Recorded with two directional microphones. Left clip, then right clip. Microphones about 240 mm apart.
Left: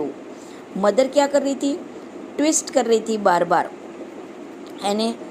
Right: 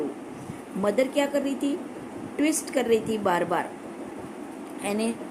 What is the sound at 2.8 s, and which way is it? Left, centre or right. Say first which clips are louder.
Speech: left 3 dB; left.